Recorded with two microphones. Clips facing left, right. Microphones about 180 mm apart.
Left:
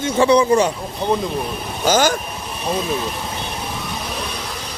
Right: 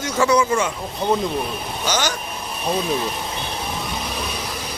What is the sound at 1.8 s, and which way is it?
Speech, 50° left (ahead or behind).